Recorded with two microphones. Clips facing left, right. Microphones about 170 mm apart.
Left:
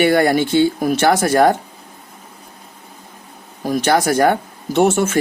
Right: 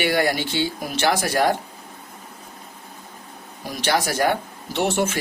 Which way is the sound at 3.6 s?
50° left (ahead or behind).